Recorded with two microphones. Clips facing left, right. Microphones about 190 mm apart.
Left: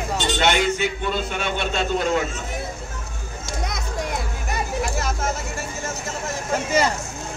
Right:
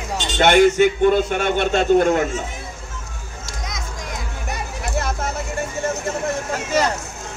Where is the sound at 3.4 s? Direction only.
60° left (ahead or behind).